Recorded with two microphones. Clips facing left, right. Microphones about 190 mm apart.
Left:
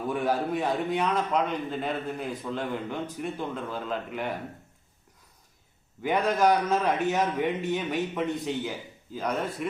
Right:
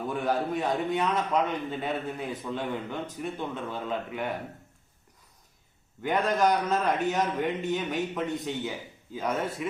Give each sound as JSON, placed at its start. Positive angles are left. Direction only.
{"t": 0.1, "sound": "a man's voice", "side_deg": 0}
{"t": 6.0, "sound": "a man's voice", "side_deg": 0}